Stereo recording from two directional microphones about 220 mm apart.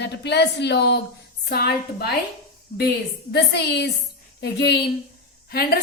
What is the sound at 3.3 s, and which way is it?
A woman's voice, 50° left (ahead or behind).